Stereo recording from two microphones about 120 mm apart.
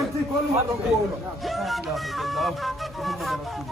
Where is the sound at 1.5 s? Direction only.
Centre (ahead or behind).